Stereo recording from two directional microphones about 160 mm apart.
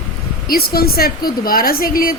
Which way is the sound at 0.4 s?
70° left (ahead or behind).